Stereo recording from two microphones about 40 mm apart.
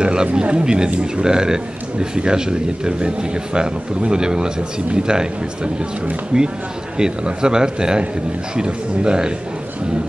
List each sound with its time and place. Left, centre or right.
0.0 s a man's voice: right